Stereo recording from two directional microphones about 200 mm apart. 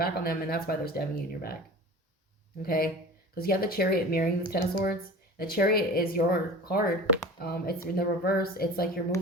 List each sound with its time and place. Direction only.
0.0 s speech: 50° left (ahead or behind)
2.6 s speech: 50° left (ahead or behind)